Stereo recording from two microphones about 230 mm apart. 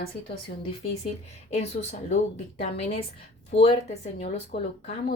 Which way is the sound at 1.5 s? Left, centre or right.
Left.